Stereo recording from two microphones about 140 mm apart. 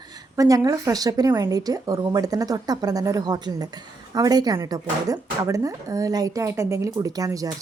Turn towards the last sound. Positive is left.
turn(degrees=-25)  # may be behind; listen again after turning